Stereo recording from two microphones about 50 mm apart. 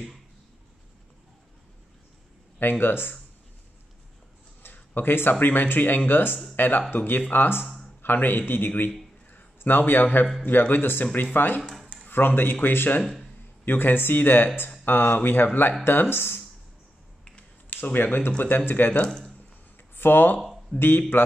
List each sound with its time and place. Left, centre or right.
2.6 s a man's voice: left
4.6 s a sound: left
5.3 s a man's voice: left
13.0 s speech: centre
13.7 s a man's voice: left
17.6 s speech: left
19.0 s speech: centre
20.0 s a man's voice: left
20.7 s a man's voice: left
21.1 s a man's voice: left